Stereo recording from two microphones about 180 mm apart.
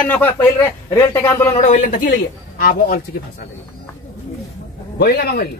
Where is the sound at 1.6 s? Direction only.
40° left (ahead or behind).